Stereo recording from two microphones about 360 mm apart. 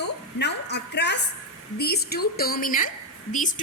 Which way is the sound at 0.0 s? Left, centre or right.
Left.